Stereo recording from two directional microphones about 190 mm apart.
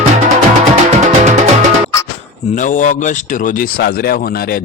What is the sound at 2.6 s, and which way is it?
A man's voice, 45° left (ahead or behind).